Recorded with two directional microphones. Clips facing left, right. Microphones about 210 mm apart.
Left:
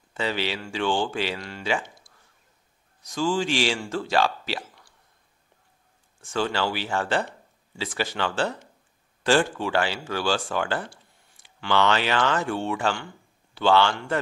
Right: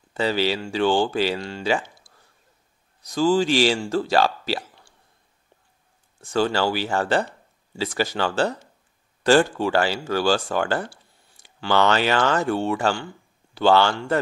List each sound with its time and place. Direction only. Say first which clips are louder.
0.1 s speech: right 6 dB; 35° right (ahead or behind)
3.0 s speech: right 6 dB; 35° right (ahead or behind)
6.2 s speech: right 5 dB; 40° right (ahead or behind)